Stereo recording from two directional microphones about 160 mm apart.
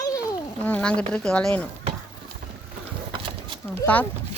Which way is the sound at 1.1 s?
5° left (ahead or behind).